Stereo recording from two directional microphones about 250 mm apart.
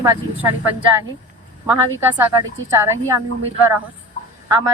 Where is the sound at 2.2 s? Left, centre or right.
Centre.